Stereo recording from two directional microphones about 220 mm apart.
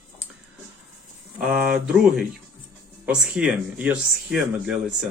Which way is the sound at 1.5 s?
5° right (ahead or behind).